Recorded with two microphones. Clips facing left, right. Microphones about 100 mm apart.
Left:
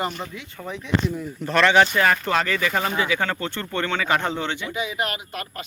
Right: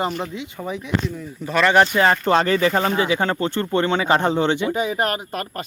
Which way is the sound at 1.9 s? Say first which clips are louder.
Right 4 dB; 25° right (ahead or behind).